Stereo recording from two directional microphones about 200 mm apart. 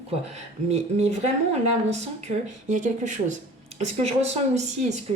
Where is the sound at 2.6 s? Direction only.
35° right (ahead or behind).